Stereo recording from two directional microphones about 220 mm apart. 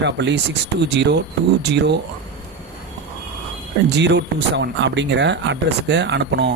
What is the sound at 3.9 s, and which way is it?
Speech, 50° right (ahead or behind).